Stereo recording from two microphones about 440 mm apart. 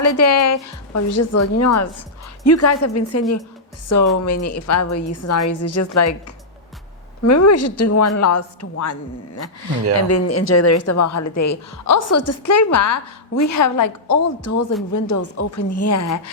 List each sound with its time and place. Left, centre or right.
0.0 s a woman's voice: left